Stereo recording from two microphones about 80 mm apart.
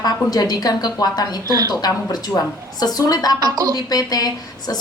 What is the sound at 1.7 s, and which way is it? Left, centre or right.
A woman's voice, left.